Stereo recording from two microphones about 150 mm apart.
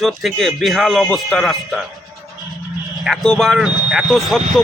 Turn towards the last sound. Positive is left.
turn(degrees=0)  # may be behind; listen again after turning